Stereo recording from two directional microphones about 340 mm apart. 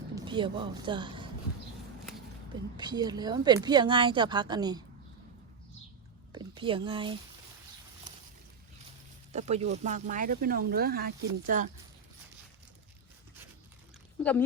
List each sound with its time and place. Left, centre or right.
0.2 s speech: centre
2.7 s speech: centre
6.3 s speech: centre
9.3 s speech: centre
14.2 s speech: centre